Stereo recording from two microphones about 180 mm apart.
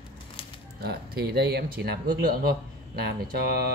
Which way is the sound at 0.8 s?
60° right (ahead or behind).